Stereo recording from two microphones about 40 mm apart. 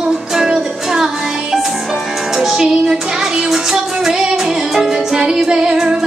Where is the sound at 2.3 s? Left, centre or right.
Centre.